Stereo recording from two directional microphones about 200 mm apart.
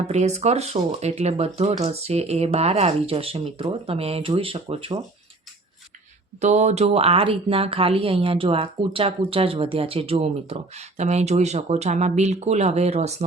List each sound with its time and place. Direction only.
0.0 s speech: 35° right (ahead or behind)
6.4 s speech: 35° right (ahead or behind)